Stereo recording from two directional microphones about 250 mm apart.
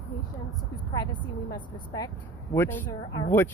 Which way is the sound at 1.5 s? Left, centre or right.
Centre.